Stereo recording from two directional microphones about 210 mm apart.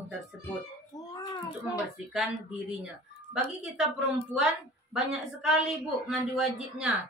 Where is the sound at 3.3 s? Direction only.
5° right (ahead or behind).